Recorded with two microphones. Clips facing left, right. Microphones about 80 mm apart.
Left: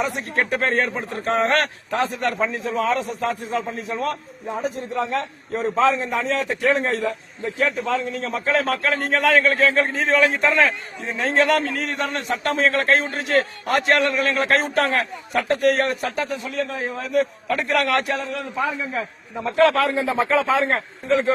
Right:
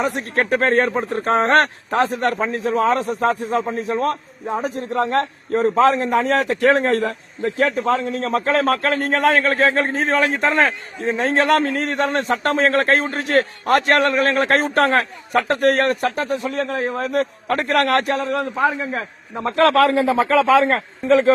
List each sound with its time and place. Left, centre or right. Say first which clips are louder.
0.0 s a man's voice: right 3 dB; right
9.0 s a man's voice: right 1 dB; right
19.5 s a man's voice: right 3 dB; right